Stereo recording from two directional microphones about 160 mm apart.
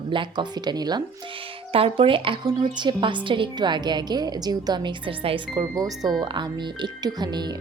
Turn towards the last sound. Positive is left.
turn(degrees=-25)  # may be behind; listen again after turning